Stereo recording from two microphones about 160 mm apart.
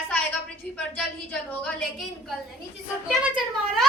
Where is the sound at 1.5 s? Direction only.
5° left (ahead or behind).